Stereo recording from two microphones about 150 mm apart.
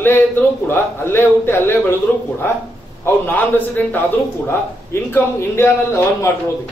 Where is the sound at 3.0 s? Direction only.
15° left (ahead or behind).